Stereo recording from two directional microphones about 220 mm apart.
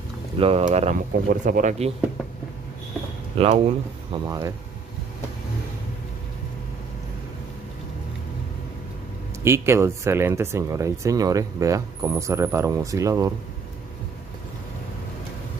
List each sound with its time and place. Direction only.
0.4 s speech: 30° right (ahead or behind)
3.3 s speech: 25° right (ahead or behind)
9.4 s speech: 10° right (ahead or behind)